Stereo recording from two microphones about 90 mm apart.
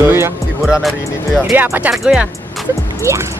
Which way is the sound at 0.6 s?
5° right (ahead or behind).